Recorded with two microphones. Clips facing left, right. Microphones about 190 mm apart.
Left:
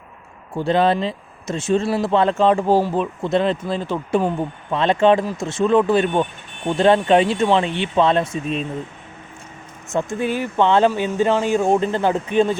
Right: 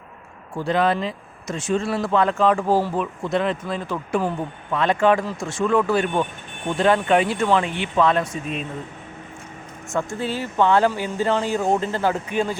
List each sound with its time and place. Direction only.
0.5 s speech: 25° left (ahead or behind)
9.9 s speech: 15° left (ahead or behind)